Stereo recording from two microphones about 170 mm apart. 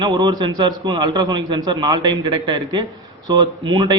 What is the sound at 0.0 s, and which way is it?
A man's voice, 25° right (ahead or behind).